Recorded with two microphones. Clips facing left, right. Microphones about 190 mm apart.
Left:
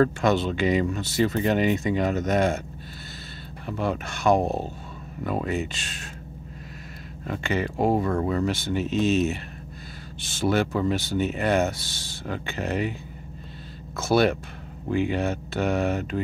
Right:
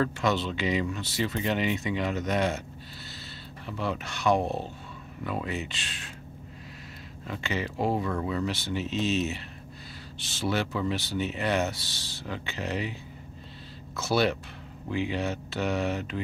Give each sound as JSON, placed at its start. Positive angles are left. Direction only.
{"t": 0.0, "sound": "speech", "side_deg": 50}
{"t": 3.6, "sound": "speech", "side_deg": 50}
{"t": 7.2, "sound": "speech", "side_deg": 50}
{"t": 13.9, "sound": "speech", "side_deg": 50}